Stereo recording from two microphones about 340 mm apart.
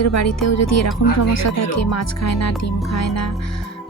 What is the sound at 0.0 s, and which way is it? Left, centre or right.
Speech, left.